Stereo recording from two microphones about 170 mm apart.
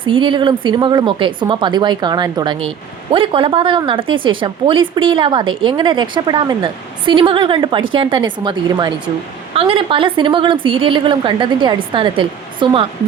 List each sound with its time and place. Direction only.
0.0 s speech: 30° right (ahead or behind)